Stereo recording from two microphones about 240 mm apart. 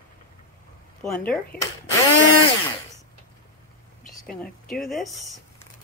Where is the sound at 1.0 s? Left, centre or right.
Centre.